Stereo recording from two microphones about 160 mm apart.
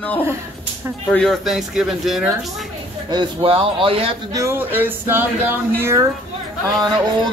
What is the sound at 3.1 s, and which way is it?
A man's voice, 30° right (ahead or behind).